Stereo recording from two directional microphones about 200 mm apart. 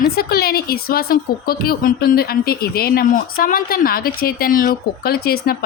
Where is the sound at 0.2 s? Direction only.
50° left (ahead or behind).